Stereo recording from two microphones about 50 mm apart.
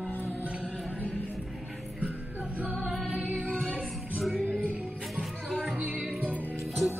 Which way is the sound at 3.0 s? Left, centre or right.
Right.